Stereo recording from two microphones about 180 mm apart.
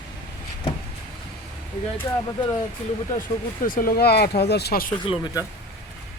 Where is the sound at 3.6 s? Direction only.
50° left (ahead or behind).